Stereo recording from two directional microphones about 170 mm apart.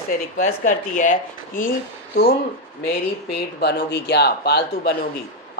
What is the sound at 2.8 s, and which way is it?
Speech, 65° left (ahead or behind).